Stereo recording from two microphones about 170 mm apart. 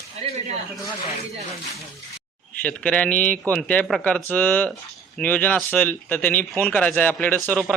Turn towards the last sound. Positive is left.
turn(degrees=10)  # may be behind; listen again after turning